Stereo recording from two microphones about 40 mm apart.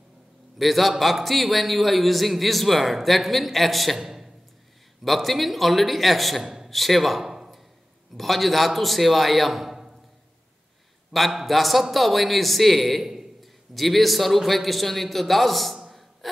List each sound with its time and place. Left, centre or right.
0.6 s a man's voice: centre
6.4 s a sound: centre
6.7 s a man's voice: centre
8.2 s a man's voice: centre
11.1 s a man's voice: centre
15.9 s music: centre